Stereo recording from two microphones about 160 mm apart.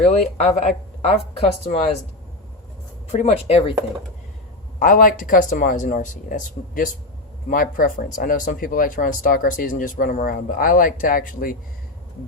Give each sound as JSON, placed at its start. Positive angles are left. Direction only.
{"t": 0.0, "sound": "speech", "side_deg": 45}
{"t": 3.1, "sound": "speech", "side_deg": 40}
{"t": 4.8, "sound": "speech", "side_deg": 60}